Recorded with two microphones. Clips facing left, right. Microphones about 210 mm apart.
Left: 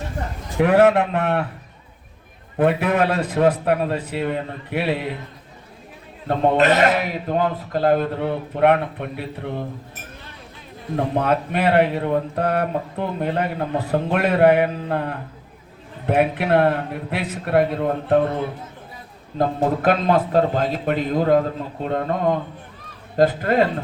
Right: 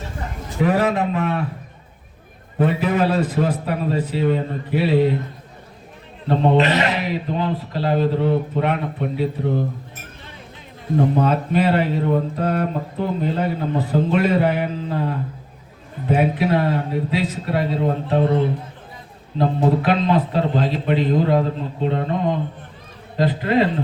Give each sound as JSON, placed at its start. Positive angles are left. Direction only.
{"t": 0.6, "sound": "speech", "side_deg": 65}
{"t": 2.6, "sound": "speech", "side_deg": 60}
{"t": 6.2, "sound": "speech", "side_deg": 50}
{"t": 10.9, "sound": "speech", "side_deg": 60}
{"t": 19.4, "sound": "speech", "side_deg": 45}